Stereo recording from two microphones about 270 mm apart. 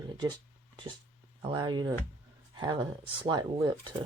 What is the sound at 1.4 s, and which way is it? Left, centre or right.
Speech, centre.